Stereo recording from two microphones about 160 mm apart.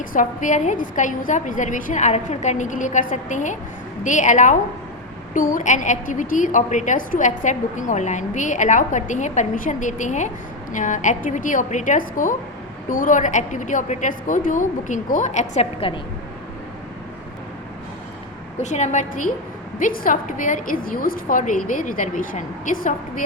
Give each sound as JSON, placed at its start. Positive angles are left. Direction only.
{"t": 0.0, "sound": "a woman's voice", "side_deg": 60}
{"t": 18.6, "sound": "a woman's voice", "side_deg": 50}
{"t": 19.8, "sound": "a woman's voice", "side_deg": 60}